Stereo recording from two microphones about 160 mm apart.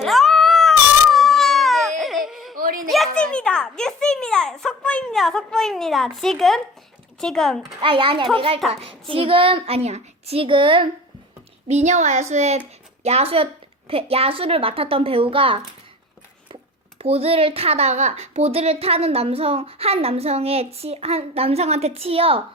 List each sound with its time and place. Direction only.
0.0 s cat: centre (ahead or behind)
2.0 s baby cry: centre (ahead or behind)
2.6 s a sound: 60° right (ahead or behind)
2.9 s a sound: centre (ahead or behind)
7.2 s speech: 5° left (ahead or behind)
7.8 s speech: 30° right (ahead or behind)
11.7 s speech: 45° right (ahead or behind)
17.0 s speech: 40° right (ahead or behind)